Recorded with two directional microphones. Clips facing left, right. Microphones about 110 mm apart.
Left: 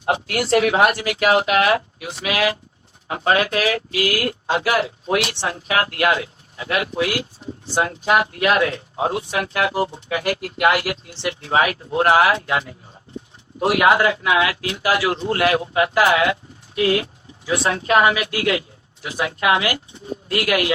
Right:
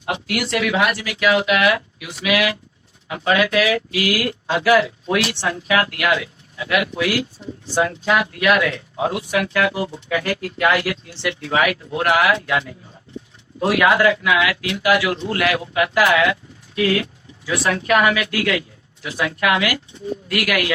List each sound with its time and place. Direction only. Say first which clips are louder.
0.0 s speech: left 2 dB; 35° left (ahead or behind)